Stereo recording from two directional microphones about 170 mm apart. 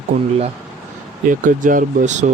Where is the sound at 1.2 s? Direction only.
50° right (ahead or behind).